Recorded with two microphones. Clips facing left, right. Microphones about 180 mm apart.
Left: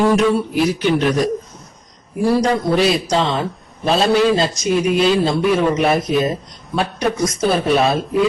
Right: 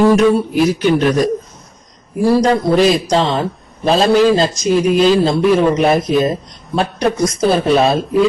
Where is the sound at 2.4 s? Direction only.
40° right (ahead or behind).